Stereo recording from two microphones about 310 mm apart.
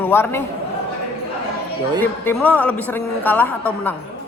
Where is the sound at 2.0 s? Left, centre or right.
Centre.